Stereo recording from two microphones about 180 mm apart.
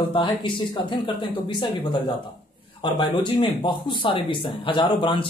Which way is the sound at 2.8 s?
25° left (ahead or behind).